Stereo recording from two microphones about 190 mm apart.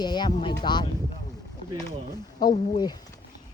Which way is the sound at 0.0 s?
20° left (ahead or behind).